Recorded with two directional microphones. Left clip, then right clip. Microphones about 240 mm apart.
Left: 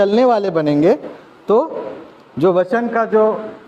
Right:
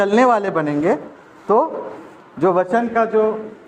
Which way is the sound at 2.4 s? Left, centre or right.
Left.